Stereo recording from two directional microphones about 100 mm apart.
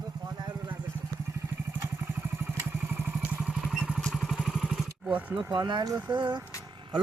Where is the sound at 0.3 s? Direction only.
45° right (ahead or behind).